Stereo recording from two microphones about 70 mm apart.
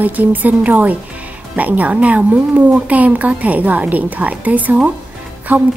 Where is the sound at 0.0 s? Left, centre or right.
Right.